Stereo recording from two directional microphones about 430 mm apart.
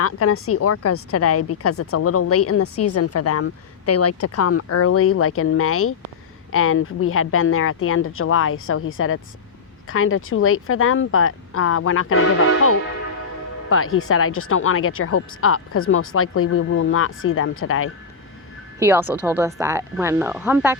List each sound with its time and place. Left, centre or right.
0.0 s a woman's voice: left
18.8 s speech: centre